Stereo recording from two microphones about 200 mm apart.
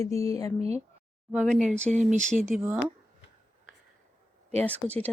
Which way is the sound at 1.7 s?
35° right (ahead or behind).